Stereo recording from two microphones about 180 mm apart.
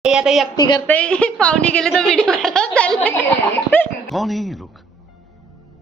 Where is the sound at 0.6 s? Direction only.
25° left (ahead or behind).